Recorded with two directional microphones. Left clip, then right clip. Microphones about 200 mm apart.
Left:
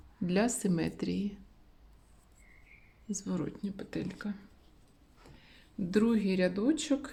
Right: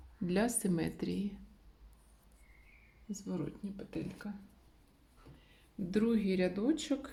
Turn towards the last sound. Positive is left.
turn(degrees=20)  # may be behind; listen again after turning